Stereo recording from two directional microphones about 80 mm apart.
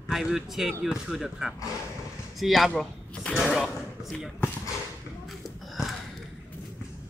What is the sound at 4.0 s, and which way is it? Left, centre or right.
Speech, centre.